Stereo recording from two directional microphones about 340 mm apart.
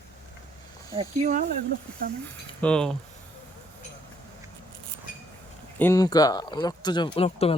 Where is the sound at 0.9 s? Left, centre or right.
Right.